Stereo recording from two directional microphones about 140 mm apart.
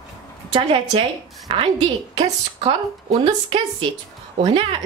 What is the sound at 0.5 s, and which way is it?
A woman's voice, 40° right (ahead or behind).